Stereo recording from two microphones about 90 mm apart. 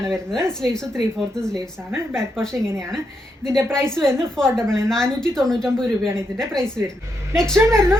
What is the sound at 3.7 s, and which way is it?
A woman's voice, 5° left (ahead or behind).